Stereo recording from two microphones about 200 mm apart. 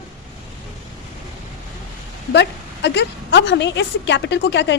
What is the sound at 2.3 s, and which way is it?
A woman's voice, 60° left (ahead or behind).